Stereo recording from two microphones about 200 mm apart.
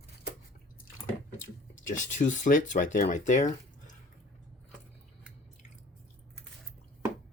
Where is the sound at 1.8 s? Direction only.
40° left (ahead or behind).